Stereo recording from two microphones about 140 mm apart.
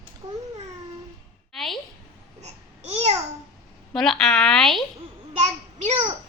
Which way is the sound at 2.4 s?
50° right (ahead or behind).